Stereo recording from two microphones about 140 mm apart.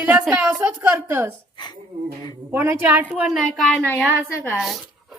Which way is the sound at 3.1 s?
5° right (ahead or behind).